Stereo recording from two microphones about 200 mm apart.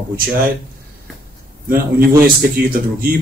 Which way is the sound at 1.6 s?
45° right (ahead or behind).